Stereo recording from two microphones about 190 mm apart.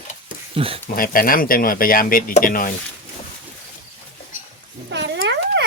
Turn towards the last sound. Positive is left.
turn(degrees=-65)  # may be behind; listen again after turning